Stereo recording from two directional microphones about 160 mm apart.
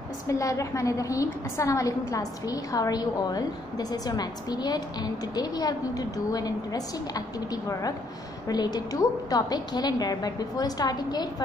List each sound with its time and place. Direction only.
0.3 s a woman's voice: 20° left (ahead or behind)